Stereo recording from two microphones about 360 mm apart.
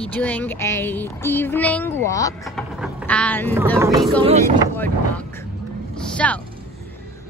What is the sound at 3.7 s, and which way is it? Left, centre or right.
Boat, centre.